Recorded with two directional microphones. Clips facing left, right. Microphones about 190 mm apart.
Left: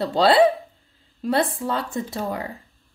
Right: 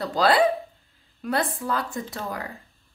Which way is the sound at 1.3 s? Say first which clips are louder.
Left 3 dB; 25° left (ahead or behind).